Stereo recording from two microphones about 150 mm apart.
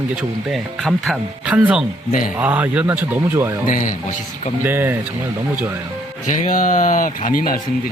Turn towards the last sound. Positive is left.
turn(degrees=65)  # may be behind; listen again after turning